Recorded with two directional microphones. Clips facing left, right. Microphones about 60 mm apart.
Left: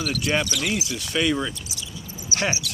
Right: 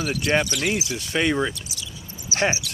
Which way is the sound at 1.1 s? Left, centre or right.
Right.